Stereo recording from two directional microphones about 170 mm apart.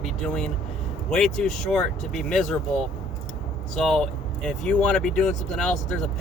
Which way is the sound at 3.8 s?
5° left (ahead or behind).